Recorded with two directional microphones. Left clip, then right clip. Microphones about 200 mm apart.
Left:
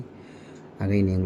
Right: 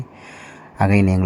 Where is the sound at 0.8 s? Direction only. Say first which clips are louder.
Right 8 dB; 40° right (ahead or behind).